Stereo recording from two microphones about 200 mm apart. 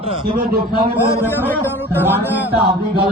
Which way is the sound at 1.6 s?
10° right (ahead or behind).